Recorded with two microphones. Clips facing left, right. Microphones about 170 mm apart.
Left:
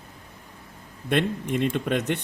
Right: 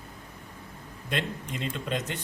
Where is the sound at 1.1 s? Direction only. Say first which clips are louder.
Left 9 dB; 55° left (ahead or behind).